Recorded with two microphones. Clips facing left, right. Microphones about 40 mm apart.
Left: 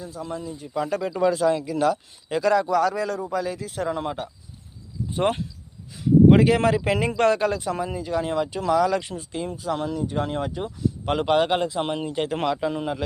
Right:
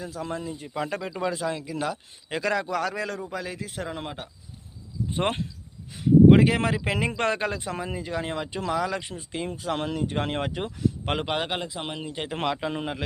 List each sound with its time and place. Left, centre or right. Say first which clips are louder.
0.0 s speech: even; right
0.3 s speech: even; right
0.7 s speech: left 6 dB; right
1.1 s speech: left 11 dB; centre
6.2 s speech: left 3 dB; centre
9.3 s speech: left 1 dB; right
9.6 s speech: left 2 dB; right
11.0 s speech: left 4 dB; right
11.3 s a man's voice: left 8 dB; centre
12.2 s speech: left 4 dB; centre
12.5 s speech: left 3 dB; right